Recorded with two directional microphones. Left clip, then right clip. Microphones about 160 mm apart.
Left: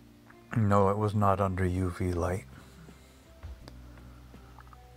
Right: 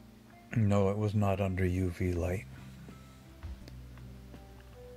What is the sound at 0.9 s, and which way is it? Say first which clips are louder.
Speech: left 5 dB; 5° left (ahead or behind).